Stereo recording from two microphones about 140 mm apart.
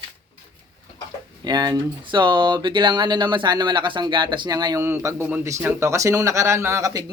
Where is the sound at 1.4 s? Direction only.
30° right (ahead or behind).